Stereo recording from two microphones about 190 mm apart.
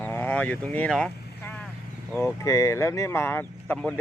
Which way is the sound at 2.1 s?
15° left (ahead or behind).